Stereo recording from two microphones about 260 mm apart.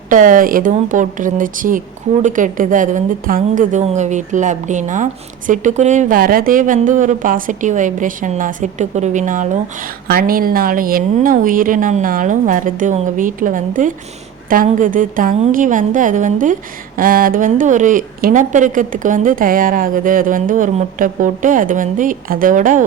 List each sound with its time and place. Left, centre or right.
0.1 s a woman's voice: right